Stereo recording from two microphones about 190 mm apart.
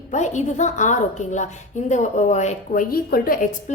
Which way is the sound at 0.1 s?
40° left (ahead or behind).